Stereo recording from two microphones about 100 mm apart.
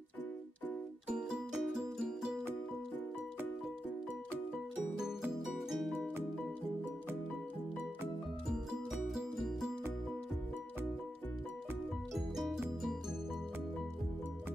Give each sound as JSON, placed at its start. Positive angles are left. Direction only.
{"t": 1.0, "sound": "music", "side_deg": -5}
{"t": 5.0, "sound": "music", "side_deg": -5}
{"t": 5.9, "sound": "music", "side_deg": -20}
{"t": 8.5, "sound": "music", "side_deg": 0}
{"t": 12.1, "sound": "music", "side_deg": 0}